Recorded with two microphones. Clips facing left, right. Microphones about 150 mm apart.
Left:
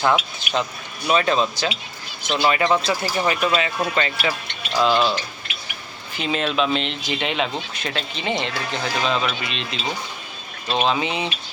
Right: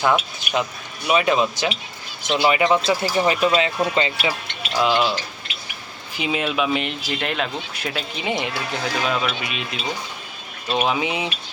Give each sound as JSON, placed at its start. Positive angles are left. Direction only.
{"t": 0.0, "sound": "speech", "side_deg": -5}
{"t": 4.8, "sound": "speech", "side_deg": -10}
{"t": 6.1, "sound": "speech", "side_deg": -10}